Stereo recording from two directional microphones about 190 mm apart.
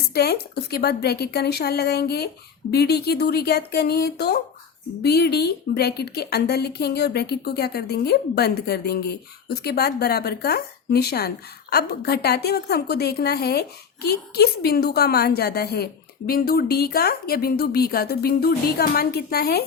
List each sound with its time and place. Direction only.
0.1 s speech: 55° left (ahead or behind)